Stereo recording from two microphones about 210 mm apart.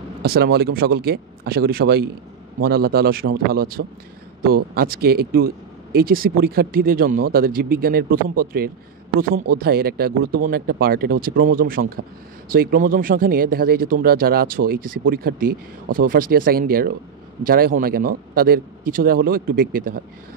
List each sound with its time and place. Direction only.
0.2 s speech: 50° right (ahead or behind)